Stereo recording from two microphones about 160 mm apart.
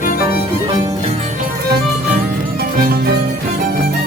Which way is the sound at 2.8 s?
70° right (ahead or behind).